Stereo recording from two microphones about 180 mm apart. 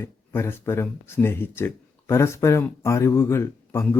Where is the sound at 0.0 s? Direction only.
15° left (ahead or behind).